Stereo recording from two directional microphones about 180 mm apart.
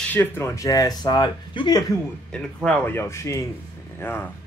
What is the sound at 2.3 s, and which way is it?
Speech, 5° left (ahead or behind).